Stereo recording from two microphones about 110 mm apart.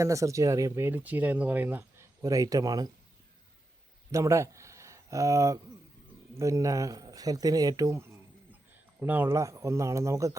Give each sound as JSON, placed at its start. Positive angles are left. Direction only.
{"t": 0.0, "sound": "speech", "side_deg": -30}
{"t": 2.2, "sound": "speech", "side_deg": -30}
{"t": 4.1, "sound": "speech", "side_deg": -30}